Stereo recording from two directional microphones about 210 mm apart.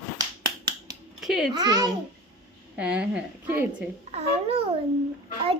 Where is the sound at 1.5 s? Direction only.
20° right (ahead or behind).